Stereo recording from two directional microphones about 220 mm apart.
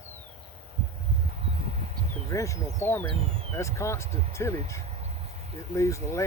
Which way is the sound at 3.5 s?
15° left (ahead or behind).